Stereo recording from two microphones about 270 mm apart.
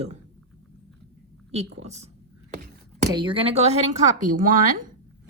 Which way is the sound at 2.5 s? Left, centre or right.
Right.